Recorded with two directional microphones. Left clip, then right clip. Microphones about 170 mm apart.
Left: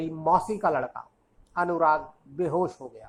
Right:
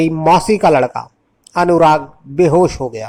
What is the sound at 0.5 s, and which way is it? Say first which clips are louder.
A man's voice: right 15 dB; 35° right (ahead or behind).